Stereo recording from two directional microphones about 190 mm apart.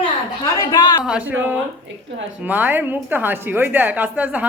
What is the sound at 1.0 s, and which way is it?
Speech, 5° right (ahead or behind).